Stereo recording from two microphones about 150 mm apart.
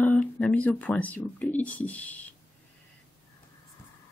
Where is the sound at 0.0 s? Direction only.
10° left (ahead or behind).